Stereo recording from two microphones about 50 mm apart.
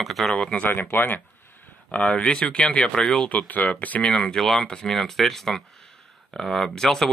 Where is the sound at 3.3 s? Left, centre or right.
Left.